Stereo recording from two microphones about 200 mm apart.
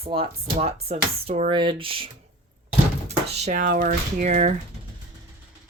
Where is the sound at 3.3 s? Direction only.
40° right (ahead or behind).